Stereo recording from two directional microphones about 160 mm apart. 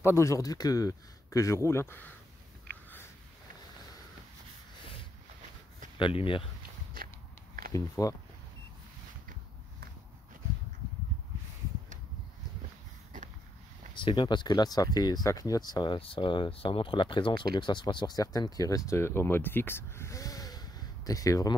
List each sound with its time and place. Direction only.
0.0 s speech: 15° left (ahead or behind)
2.7 s a sound: 80° right
5.9 s speech: 30° left (ahead or behind)
7.7 s speech: 20° left (ahead or behind)
13.9 s speech: 30° left (ahead or behind)